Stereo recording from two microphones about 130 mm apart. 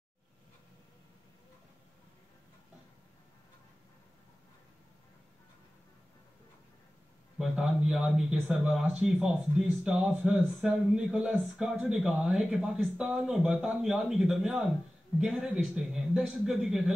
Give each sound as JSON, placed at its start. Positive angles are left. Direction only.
{"t": 7.3, "sound": "speech", "side_deg": -5}